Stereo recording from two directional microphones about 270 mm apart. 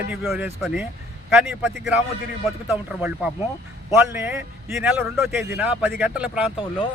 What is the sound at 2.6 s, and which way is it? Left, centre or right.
Speech, centre.